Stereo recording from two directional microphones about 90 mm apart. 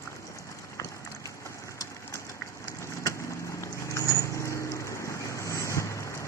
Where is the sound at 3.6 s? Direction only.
35° left (ahead or behind).